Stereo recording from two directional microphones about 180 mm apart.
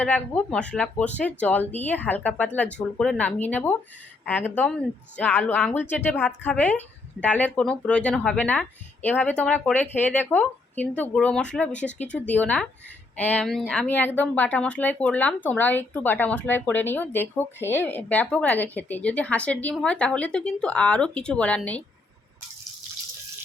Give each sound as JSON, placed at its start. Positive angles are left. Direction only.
{"t": 0.0, "sound": "a woman's voice", "side_deg": 5}